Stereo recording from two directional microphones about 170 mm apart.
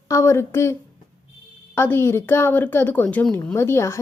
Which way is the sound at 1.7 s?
15° left (ahead or behind).